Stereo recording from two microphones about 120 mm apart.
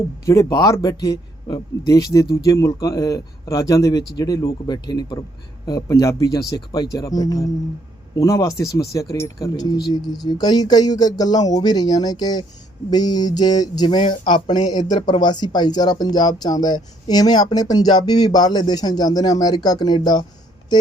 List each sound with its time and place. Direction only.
0.3 s speech: 30° left (ahead or behind)